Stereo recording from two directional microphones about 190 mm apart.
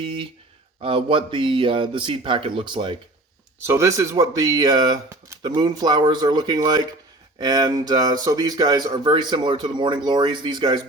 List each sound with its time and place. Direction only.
0.0 s speech: 25° right (ahead or behind)
3.6 s speech: 15° right (ahead or behind)